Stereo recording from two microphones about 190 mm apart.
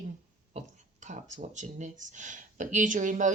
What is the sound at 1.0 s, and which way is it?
Speech, 40° right (ahead or behind).